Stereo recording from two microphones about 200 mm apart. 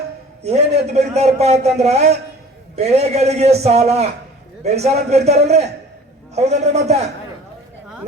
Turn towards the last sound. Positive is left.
turn(degrees=-35)  # may be behind; listen again after turning